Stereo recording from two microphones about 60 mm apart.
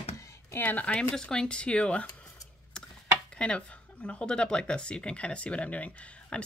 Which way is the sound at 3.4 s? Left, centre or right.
Centre.